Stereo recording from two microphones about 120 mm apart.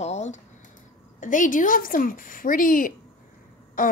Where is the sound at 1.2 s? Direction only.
90° left.